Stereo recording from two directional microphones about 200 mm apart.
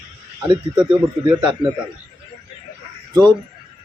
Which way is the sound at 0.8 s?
5° right (ahead or behind).